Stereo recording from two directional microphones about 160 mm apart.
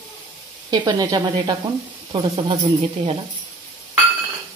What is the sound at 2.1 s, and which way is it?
Speech, 35° right (ahead or behind).